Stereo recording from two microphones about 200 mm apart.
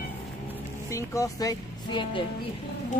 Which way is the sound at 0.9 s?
15° left (ahead or behind).